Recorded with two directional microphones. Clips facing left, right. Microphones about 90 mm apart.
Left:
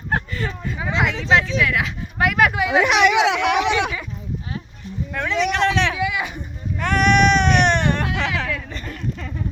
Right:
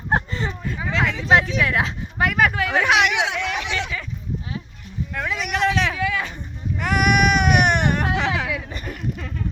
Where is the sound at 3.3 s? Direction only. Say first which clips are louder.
Left 7 dB; 80° left.